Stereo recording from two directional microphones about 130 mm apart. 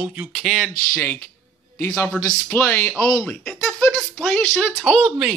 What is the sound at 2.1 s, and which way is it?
Speech, 15° left (ahead or behind).